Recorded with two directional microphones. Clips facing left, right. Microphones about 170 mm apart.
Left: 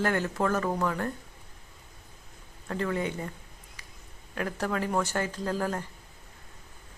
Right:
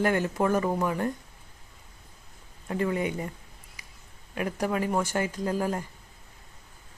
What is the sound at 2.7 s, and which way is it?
Speech, 10° right (ahead or behind).